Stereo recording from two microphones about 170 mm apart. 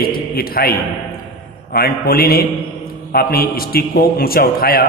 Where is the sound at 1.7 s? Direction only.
65° left (ahead or behind).